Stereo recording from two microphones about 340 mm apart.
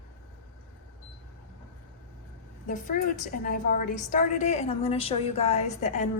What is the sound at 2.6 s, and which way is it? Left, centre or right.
A woman's voice, left.